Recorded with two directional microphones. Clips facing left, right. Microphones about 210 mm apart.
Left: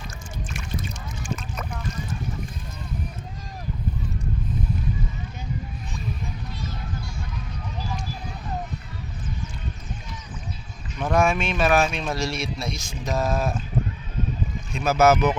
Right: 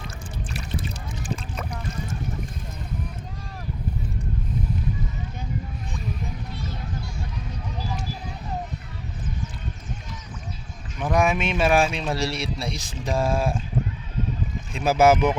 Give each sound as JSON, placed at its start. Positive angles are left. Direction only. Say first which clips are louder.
{"t": 0.5, "sound": "boat", "louder": "right 1 dB", "side_deg": -35}
{"t": 11.0, "sound": "speech", "louder": "even", "side_deg": -15}
{"t": 14.7, "sound": "speech", "louder": "right 1 dB", "side_deg": -30}